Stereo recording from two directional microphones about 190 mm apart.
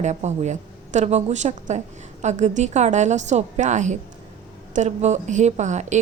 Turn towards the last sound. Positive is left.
turn(degrees=-40)  # may be behind; listen again after turning